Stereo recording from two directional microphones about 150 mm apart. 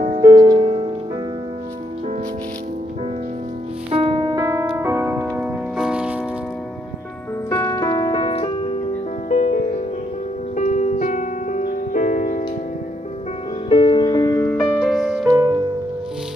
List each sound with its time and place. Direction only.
0.2 s music: 25° right (ahead or behind)
0.6 s music: 40° right (ahead or behind)
3.9 s music: 35° right (ahead or behind); by 6.1 s 5° right (ahead or behind)
7.4 s music: 20° left (ahead or behind); by 12.4 s 55° left (ahead or behind)
13.7 s music: 35° left (ahead or behind); by 14.7 s 15° left (ahead or behind)
14.8 s music: centre (ahead or behind)
15.2 s music: 15° right (ahead or behind)